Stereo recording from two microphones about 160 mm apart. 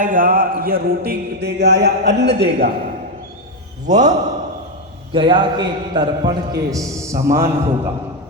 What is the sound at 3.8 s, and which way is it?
Speech, 50° right (ahead or behind).